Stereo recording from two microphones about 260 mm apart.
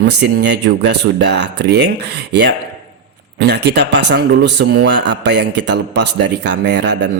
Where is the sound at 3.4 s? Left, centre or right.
Right.